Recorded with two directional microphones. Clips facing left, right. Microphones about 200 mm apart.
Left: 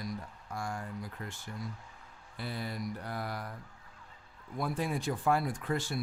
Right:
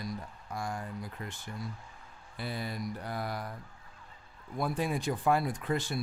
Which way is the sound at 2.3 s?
15° right (ahead or behind).